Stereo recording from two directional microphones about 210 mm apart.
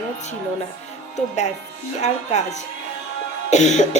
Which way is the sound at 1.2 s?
35° left (ahead or behind).